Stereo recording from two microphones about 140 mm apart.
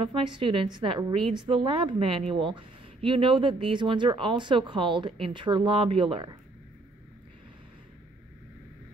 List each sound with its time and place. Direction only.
0.0 s speech: 40° right (ahead or behind)